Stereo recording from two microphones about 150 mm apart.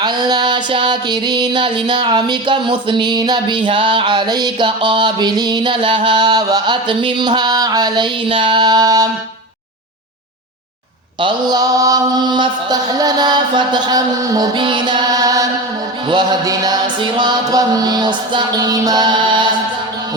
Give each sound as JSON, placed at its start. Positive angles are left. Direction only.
{"t": 0.0, "sound": "music", "side_deg": -30}
{"t": 11.2, "sound": "mantra", "side_deg": -30}
{"t": 16.0, "sound": "music", "side_deg": -30}